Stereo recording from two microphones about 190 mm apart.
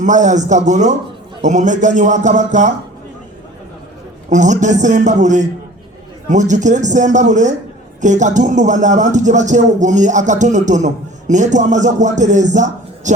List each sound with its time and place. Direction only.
0.0 s speech: 40° right (ahead or behind)
4.3 s speech: 40° right (ahead or behind)